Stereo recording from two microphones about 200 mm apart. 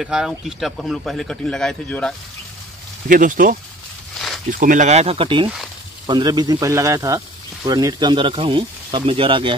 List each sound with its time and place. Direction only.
0.0 s a man's voice: 5° right (ahead or behind)
3.1 s a man's voice: 40° right (ahead or behind); by 9.5 s 25° right (ahead or behind)